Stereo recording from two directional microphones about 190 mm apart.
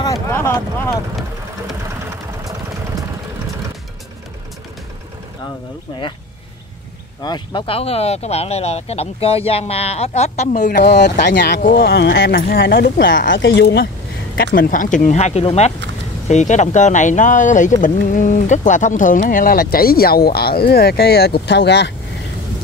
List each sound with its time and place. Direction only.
0.0 s a sound: 15° left (ahead or behind)
2.0 s vehicle: 15° right (ahead or behind)
7.2 s speech: 25° left (ahead or behind); by 10.8 s 40° left (ahead or behind)
10.8 s speech: 60° left (ahead or behind)
11.6 s speech: 50° left (ahead or behind)
13.3 s speech: 80° left
14.3 s speech: 55° left (ahead or behind)